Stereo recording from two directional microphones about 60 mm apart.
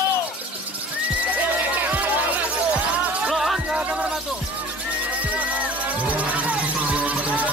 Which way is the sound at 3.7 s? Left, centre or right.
Centre.